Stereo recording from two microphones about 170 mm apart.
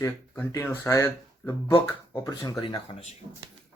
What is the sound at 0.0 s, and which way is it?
Speech, 15° left (ahead or behind).